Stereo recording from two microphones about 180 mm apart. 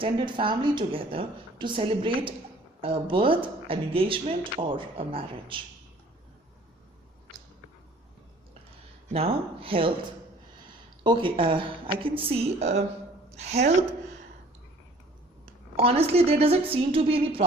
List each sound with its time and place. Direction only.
0.0 s speech: 25° right (ahead or behind)
9.1 s a woman's voice: 30° right (ahead or behind)
11.0 s a woman's voice: 25° right (ahead or behind)
15.7 s a woman's voice: 35° right (ahead or behind)